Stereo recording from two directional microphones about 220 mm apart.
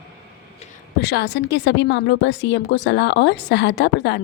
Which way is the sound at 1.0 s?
50° left (ahead or behind).